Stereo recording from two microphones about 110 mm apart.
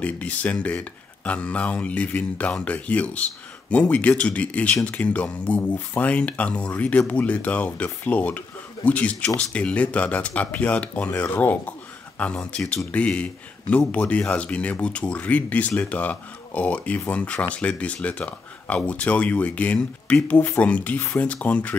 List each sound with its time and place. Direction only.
0.0 s speech: 10° left (ahead or behind)